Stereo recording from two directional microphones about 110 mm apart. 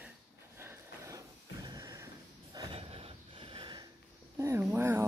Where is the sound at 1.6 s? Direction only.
35° right (ahead or behind).